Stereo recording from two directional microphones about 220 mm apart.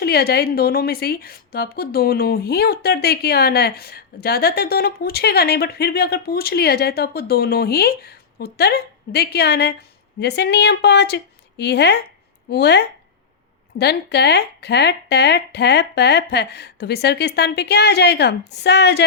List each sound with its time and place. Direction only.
0.0 s a woman's voice: 45° left (ahead or behind)